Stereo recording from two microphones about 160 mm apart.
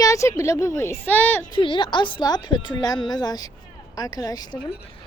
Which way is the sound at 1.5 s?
30° left (ahead or behind).